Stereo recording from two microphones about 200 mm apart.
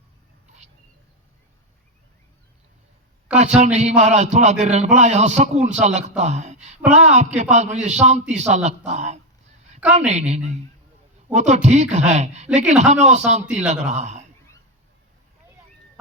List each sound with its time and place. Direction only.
3.2 s a man's voice: 35° right (ahead or behind)